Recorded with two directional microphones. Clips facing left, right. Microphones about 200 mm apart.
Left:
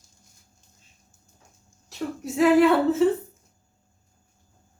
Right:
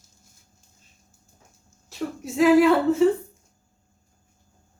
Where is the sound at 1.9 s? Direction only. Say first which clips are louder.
Even; centre (ahead or behind).